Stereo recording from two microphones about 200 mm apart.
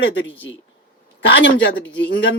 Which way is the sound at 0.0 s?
65° left (ahead or behind).